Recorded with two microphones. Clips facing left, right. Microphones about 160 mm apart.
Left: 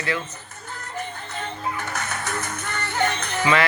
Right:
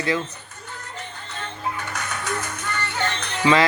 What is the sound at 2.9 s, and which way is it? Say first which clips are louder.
Music: left 6 dB; 10° left (ahead or behind).